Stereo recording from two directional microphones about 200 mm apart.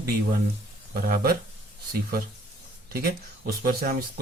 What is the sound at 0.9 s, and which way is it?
Speech, 45° right (ahead or behind).